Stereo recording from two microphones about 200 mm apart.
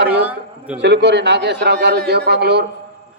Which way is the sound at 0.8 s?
60° right (ahead or behind).